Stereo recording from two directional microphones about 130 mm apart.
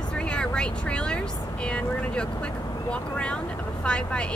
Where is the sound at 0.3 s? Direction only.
10° left (ahead or behind).